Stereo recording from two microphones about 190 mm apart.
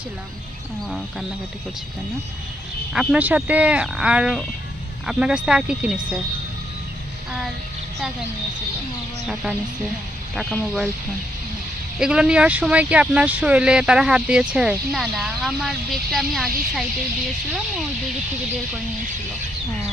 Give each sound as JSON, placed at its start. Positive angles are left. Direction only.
{"t": 2.9, "sound": "speech", "side_deg": -5}
{"t": 9.2, "sound": "speech", "side_deg": -5}
{"t": 11.9, "sound": "speech", "side_deg": -5}